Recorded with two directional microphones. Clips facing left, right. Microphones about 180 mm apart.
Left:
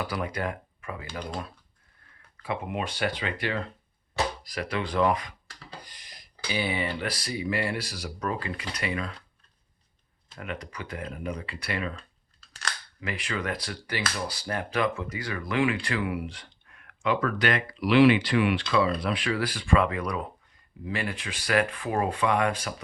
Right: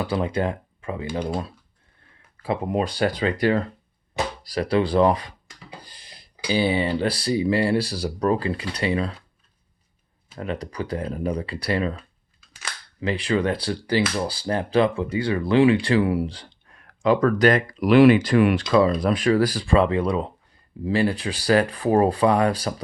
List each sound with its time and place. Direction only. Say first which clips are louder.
0.0 s speech: right 7 dB; 25° right (ahead or behind)
5.8 s a sound: right 3 dB; 30° right (ahead or behind)
6.5 s speech: right 8 dB; 30° right (ahead or behind)
10.3 s speech: right 8 dB; 30° right (ahead or behind)
13.0 s speech: right 11 dB; 30° right (ahead or behind)